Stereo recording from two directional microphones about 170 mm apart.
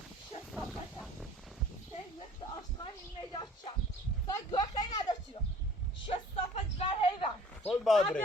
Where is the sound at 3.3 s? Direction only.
30° left (ahead or behind).